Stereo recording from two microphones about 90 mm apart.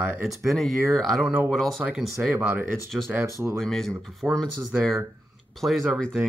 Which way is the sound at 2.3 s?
25° right (ahead or behind).